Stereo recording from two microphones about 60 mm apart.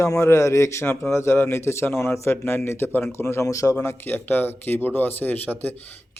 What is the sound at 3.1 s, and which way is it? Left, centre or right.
Speech, left.